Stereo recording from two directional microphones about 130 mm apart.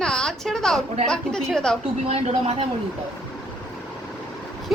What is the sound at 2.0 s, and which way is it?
Speech, 55° right (ahead or behind).